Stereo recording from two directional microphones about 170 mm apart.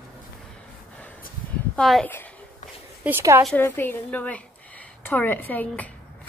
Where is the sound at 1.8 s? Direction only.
5° left (ahead or behind).